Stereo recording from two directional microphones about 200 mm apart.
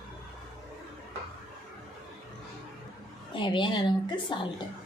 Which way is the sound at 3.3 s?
25° left (ahead or behind).